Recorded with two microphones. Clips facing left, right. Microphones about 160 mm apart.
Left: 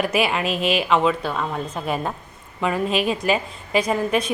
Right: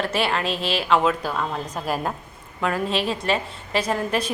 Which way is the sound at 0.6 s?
30° right (ahead or behind).